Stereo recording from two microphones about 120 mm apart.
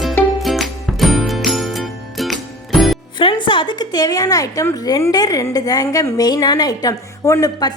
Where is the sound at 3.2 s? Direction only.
45° left (ahead or behind).